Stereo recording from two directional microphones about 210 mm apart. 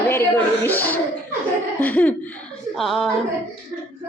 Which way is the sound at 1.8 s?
10° left (ahead or behind).